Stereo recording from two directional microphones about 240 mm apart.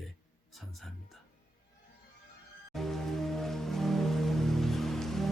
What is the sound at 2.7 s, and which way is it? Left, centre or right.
Music, centre.